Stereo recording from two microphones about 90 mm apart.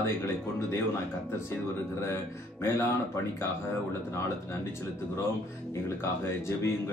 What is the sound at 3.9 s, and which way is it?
Speech, 30° left (ahead or behind).